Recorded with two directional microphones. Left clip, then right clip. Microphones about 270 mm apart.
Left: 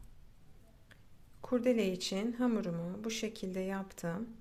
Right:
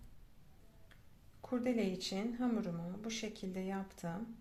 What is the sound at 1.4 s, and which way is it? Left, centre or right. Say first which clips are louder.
Speech: left 6 dB; left.